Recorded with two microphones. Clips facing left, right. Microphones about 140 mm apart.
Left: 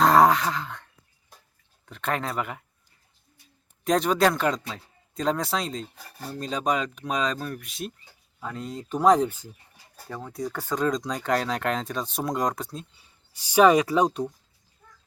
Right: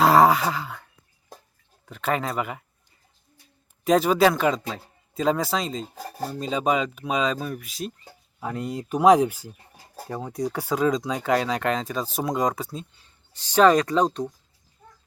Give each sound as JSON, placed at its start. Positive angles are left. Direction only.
{"t": 0.0, "sound": "sigh", "side_deg": -5}
{"t": 1.9, "sound": "speech", "side_deg": 0}
{"t": 3.8, "sound": "speech", "side_deg": -5}
{"t": 5.8, "sound": "speech", "side_deg": -45}
{"t": 6.4, "sound": "speech", "side_deg": -5}
{"t": 8.6, "sound": "speech", "side_deg": -10}
{"t": 13.0, "sound": "speech", "side_deg": 10}